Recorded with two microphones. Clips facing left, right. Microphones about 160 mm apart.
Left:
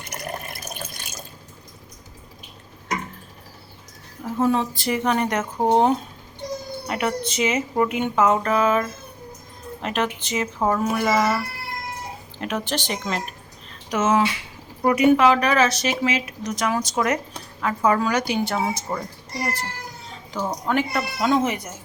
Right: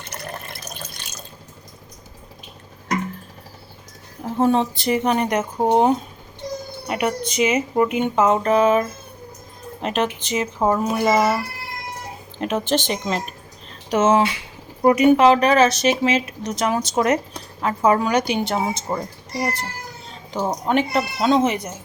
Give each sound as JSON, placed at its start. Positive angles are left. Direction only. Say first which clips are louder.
{"t": 0.0, "sound": "water", "louder": "left 1 dB", "side_deg": 15}
{"t": 4.4, "sound": "a woman's voice", "louder": "right 3 dB", "side_deg": -30}
{"t": 12.4, "sound": "a woman's voice", "louder": "right 5 dB", "side_deg": -25}
{"t": 20.3, "sound": "a woman's voice", "louder": "right 3 dB", "side_deg": -25}